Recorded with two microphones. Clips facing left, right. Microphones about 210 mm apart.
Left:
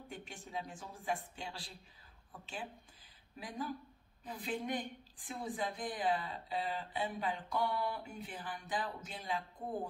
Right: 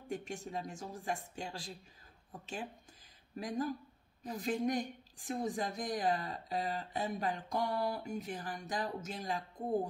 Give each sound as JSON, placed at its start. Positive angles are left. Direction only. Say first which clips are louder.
{"t": 0.1, "sound": "a woman's voice", "louder": "right 6 dB", "side_deg": -45}